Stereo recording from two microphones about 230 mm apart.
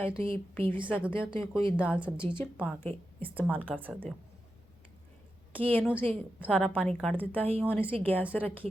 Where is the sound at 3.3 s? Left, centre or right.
Centre.